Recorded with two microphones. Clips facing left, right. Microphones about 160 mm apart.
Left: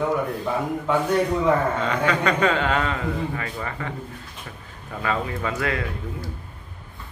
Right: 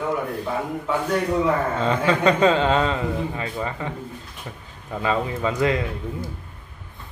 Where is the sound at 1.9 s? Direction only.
25° right (ahead or behind).